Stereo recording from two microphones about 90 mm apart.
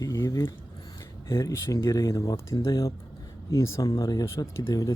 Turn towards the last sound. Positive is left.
turn(degrees=35)  # may be behind; listen again after turning